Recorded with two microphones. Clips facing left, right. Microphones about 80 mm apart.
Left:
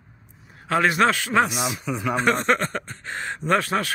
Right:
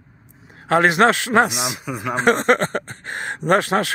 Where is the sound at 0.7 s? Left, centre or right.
Right.